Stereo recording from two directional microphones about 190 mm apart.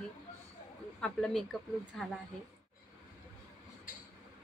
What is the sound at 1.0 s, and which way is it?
Speech, 5° left (ahead or behind).